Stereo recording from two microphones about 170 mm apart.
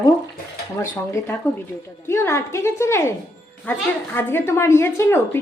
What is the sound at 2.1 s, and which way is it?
Speech, 15° left (ahead or behind).